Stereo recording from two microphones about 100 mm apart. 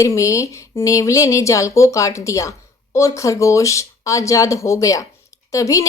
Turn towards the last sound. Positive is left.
turn(degrees=35)  # may be behind; listen again after turning